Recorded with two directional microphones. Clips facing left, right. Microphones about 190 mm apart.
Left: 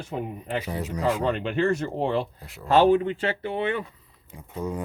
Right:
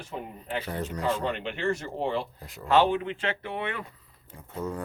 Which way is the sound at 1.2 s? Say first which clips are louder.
Left 7 dB; 45° left (ahead or behind).